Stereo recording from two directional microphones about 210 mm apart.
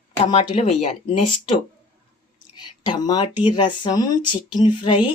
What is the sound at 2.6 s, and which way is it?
A woman's voice, 20° left (ahead or behind).